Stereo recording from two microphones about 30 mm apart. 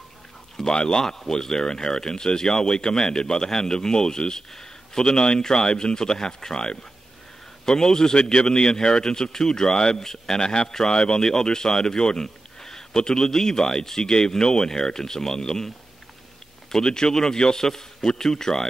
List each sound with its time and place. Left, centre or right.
0.6 s speech: left
16.7 s speech: left